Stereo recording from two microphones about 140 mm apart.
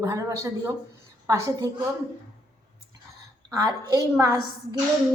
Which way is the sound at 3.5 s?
25° right (ahead or behind).